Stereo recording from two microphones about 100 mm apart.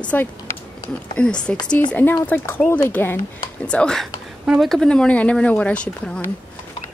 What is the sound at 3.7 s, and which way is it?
Speech, 10° left (ahead or behind).